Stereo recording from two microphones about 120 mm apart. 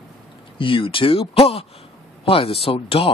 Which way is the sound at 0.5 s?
45° left (ahead or behind).